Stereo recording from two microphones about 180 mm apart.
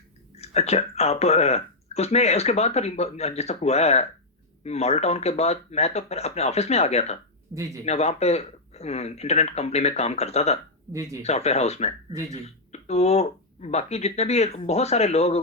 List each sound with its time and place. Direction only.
0.3 s speech: 35° left (ahead or behind)